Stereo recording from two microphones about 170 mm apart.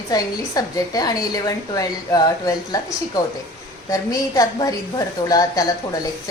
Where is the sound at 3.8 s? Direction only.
20° left (ahead or behind).